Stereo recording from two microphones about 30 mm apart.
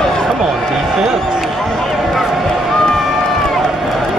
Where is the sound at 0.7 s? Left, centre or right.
Centre.